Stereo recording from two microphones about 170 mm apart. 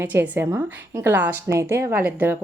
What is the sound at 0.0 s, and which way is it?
A woman's voice, 15° right (ahead or behind).